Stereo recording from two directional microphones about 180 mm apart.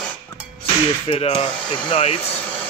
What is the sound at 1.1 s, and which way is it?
Speech, 35° left (ahead or behind).